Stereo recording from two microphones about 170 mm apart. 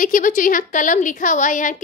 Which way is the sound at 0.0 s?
50° left (ahead or behind).